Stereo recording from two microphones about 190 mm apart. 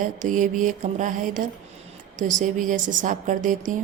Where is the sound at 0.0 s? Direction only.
45° right (ahead or behind).